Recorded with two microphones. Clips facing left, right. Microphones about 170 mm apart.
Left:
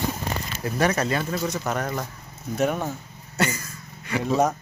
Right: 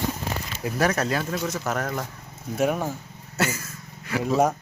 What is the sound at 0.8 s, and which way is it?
Speech, centre (ahead or behind).